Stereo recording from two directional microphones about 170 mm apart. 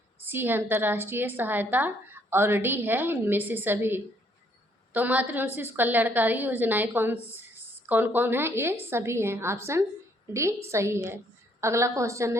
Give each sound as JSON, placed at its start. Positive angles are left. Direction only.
{"t": 0.2, "sound": "a woman's voice", "side_deg": -10}